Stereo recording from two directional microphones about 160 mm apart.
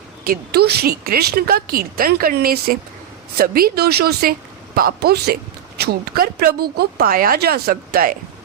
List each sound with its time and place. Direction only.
0.3 s a woman's voice: 80° right